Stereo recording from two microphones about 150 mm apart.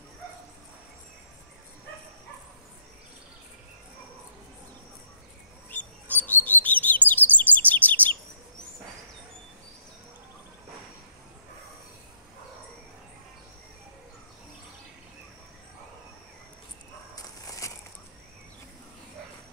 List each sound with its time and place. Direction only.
5.7 s bird: 10° left (ahead or behind)
7.1 s chirp: 10° left (ahead or behind)
17.1 s a sound: 20° left (ahead or behind)